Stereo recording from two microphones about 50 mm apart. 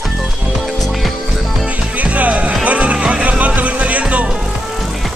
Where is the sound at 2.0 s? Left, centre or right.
Right.